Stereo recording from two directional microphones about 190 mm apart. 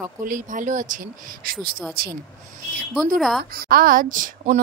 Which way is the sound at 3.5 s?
50° right (ahead or behind).